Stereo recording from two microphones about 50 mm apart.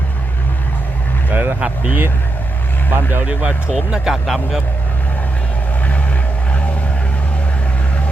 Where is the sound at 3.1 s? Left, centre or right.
Right.